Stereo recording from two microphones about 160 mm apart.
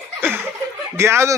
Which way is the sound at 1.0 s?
15° right (ahead or behind).